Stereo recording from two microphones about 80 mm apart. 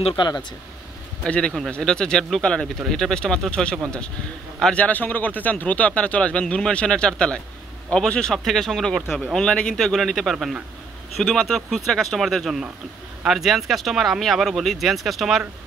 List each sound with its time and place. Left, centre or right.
0.2 s speech: left
1.2 s a man's voice: centre
4.8 s speech: left; by 9.2 s centre
9.3 s speech: centre